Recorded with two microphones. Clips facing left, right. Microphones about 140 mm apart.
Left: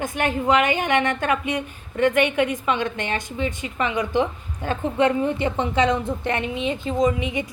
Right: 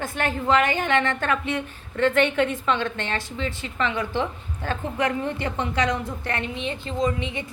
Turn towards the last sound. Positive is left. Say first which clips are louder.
# left 4 dB
turn(degrees=15)  # may be behind; listen again after turning